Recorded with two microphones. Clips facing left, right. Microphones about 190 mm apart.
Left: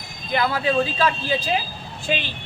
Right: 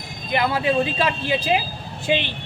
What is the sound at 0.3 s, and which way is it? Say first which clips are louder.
Speech: right 1 dB; 20° right (ahead or behind).